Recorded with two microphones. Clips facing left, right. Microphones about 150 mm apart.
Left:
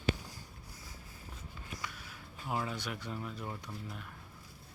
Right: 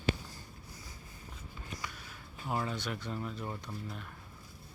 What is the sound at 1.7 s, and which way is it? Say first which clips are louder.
Speech: right 1 dB; centre (ahead or behind).